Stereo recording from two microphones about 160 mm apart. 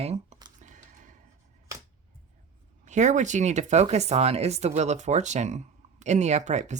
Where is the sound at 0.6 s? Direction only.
50° right (ahead or behind).